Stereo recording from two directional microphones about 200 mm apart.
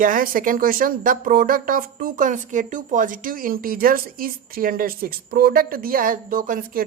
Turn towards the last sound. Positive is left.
turn(degrees=-45)  # may be behind; listen again after turning